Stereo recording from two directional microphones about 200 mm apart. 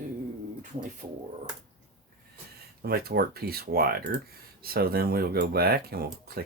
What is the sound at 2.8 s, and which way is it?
Speech, 50° right (ahead or behind).